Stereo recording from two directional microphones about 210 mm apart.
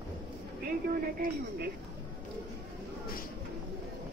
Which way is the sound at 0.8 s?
45° right (ahead or behind).